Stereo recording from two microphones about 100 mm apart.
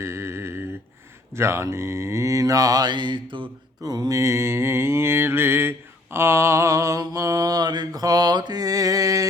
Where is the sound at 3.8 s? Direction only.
40° right (ahead or behind).